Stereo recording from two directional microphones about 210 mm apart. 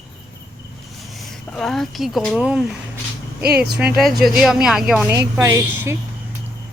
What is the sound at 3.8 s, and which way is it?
Speech, 5° right (ahead or behind).